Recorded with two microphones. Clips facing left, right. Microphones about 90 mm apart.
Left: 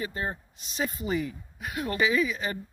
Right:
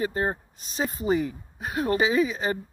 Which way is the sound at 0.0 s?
35° right (ahead or behind).